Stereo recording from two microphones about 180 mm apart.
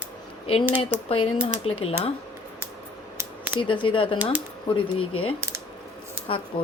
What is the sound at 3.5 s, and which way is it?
Speech, 25° left (ahead or behind).